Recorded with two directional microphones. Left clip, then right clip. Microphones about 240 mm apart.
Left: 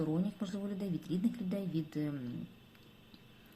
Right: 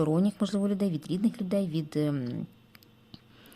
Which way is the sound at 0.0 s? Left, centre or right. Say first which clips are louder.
Right 10 dB; right.